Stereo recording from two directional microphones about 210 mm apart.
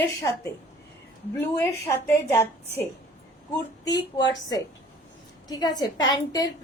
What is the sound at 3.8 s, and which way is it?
A woman's voice, 20° left (ahead or behind).